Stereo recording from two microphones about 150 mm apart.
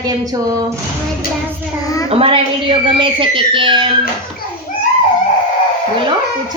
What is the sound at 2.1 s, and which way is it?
A man's voice, 35° right (ahead or behind).